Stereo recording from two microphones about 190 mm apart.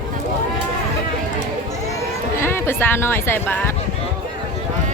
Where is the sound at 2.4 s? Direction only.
15° left (ahead or behind).